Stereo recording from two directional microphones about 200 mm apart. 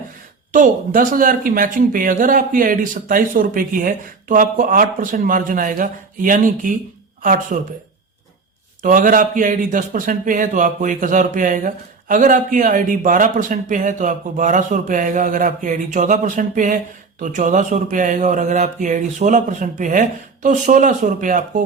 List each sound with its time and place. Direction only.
0.5 s speech: 45° right (ahead or behind)
8.8 s a man's voice: 40° right (ahead or behind)